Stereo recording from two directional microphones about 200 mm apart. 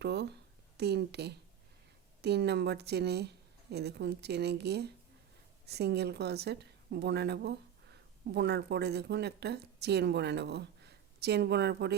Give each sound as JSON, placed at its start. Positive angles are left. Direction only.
{"t": 0.0, "sound": "a woman's voice", "side_deg": -55}